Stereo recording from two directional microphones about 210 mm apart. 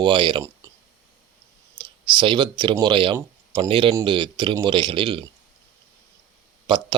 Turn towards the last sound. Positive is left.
turn(degrees=-25)  # may be behind; listen again after turning